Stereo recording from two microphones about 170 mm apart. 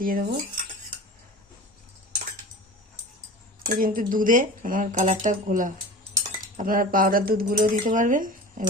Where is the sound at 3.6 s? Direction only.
55° right (ahead or behind).